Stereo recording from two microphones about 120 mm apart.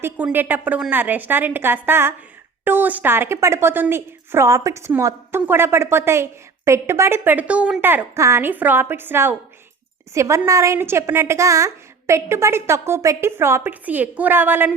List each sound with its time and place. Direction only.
0.0 s a woman's voice: 15° right (ahead or behind)